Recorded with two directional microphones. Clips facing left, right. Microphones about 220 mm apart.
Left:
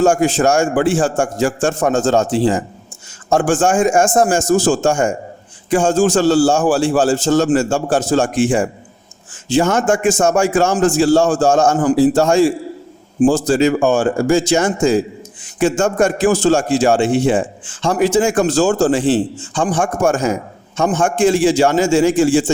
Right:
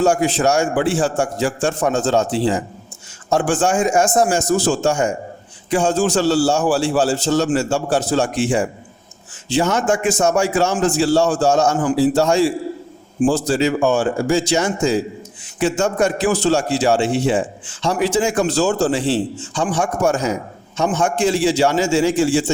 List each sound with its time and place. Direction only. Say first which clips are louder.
0.0 s a man's voice: left 3 dB; 45° left (ahead or behind)